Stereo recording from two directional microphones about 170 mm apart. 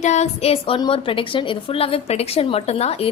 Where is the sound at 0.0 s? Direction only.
40° left (ahead or behind).